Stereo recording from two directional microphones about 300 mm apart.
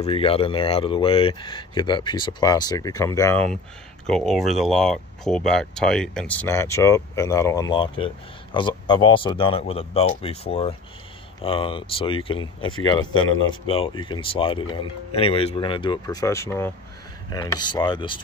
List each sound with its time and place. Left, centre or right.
0.0 s speech: centre